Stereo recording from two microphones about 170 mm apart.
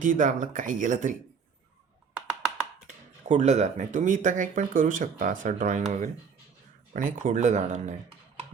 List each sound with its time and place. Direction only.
0.0 s speech: 50° right (ahead or behind)
3.2 s speech: 45° right (ahead or behind)
6.9 s speech: 50° right (ahead or behind)